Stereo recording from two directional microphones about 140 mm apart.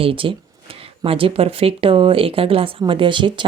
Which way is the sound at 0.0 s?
40° right (ahead or behind).